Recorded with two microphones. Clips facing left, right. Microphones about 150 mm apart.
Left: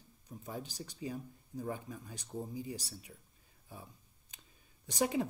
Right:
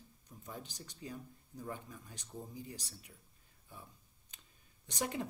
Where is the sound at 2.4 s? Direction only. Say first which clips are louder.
Left 6 dB; 10° left (ahead or behind).